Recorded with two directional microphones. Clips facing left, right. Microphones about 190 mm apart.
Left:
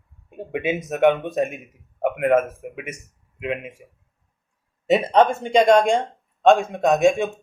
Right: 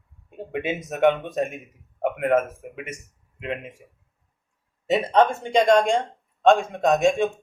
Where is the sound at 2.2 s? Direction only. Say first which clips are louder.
Left 3 dB; 15° left (ahead or behind).